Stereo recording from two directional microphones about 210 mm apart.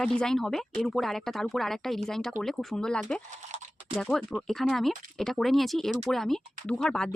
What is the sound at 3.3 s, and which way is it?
Typing, 35° right (ahead or behind).